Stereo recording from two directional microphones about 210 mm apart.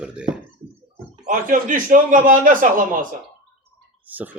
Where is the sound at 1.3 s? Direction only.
40° right (ahead or behind).